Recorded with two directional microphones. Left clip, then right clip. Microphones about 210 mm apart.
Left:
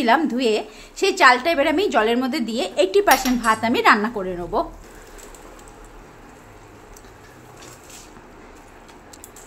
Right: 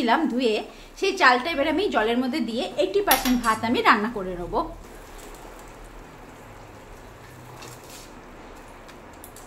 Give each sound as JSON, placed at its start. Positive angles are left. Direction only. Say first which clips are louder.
{"t": 0.0, "sound": "a woman's voice", "louder": "left 4 dB", "side_deg": 30}